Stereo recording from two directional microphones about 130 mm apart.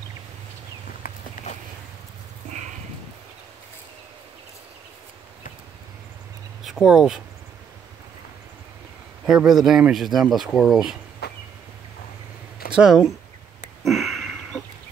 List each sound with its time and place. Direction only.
1.4 s a sound: 90° left
6.6 s speech: 5° right (ahead or behind)
9.2 s speech: 5° right (ahead or behind)
12.7 s speech: 5° right (ahead or behind)
13.8 s sniff: centre (ahead or behind)